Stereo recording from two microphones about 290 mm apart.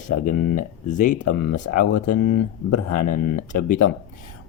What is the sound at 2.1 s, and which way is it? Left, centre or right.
Speech, left.